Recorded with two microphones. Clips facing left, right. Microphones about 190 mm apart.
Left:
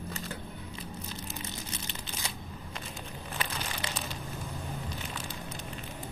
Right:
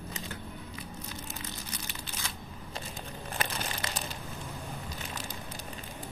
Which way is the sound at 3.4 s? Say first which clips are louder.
Right 2 dB; 45° right (ahead or behind).